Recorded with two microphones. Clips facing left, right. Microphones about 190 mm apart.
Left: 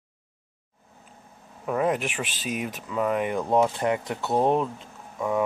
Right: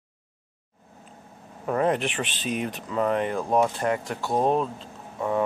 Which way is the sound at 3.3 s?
20° left (ahead or behind).